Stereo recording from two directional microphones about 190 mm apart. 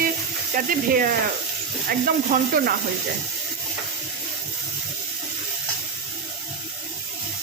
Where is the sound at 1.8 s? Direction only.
50° right (ahead or behind).